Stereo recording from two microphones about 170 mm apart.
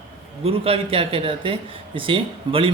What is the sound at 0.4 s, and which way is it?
A man's voice, 35° right (ahead or behind).